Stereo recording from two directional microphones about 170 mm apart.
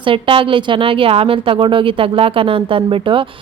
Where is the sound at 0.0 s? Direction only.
30° right (ahead or behind).